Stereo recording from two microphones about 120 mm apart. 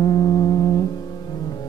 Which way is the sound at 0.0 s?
40° left (ahead or behind).